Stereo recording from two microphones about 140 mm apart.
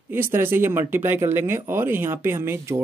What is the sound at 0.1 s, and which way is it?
Speech, 15° right (ahead or behind).